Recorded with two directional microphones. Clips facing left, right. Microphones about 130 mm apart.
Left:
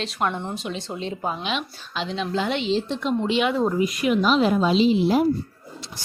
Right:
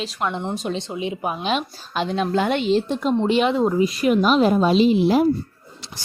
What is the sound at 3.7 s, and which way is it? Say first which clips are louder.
Speech: right 3 dB; 30° right (ahead or behind).